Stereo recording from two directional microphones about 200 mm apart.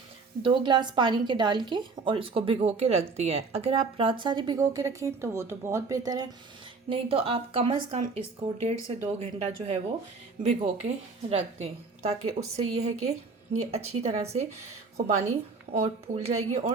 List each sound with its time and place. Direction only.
0.4 s a woman's voice: 25° right (ahead or behind)